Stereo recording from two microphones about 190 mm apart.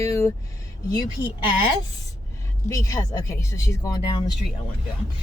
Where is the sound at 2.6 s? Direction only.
15° left (ahead or behind).